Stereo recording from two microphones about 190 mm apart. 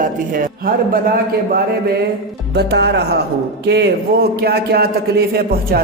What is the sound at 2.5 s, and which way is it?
A man's voice, 60° right (ahead or behind).